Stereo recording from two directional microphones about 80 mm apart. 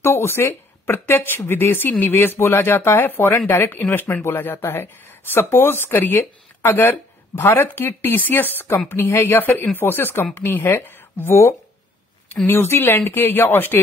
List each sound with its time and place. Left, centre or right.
0.0 s speech: left